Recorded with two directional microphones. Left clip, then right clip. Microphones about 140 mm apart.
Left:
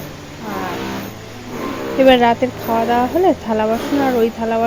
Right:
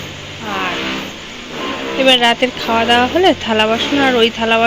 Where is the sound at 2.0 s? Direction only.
40° left (ahead or behind).